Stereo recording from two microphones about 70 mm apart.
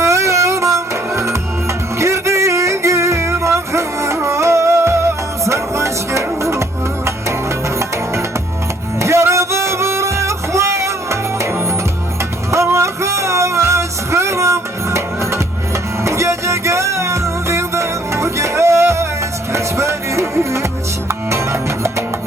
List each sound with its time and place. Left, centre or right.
0.0 s music: right
9.0 s music: right
12.7 s music: right